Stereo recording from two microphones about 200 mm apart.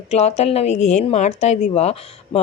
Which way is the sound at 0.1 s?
30° left (ahead or behind).